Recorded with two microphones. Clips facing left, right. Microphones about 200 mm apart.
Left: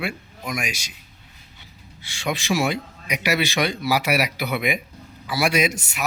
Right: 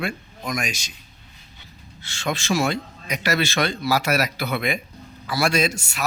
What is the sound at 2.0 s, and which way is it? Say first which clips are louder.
Speech: even; 15° left (ahead or behind).